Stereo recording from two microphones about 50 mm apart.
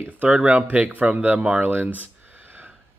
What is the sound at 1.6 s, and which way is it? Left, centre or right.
Speech, right.